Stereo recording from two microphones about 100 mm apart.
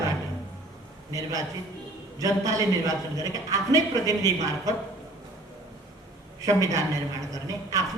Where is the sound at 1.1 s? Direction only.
35° right (ahead or behind).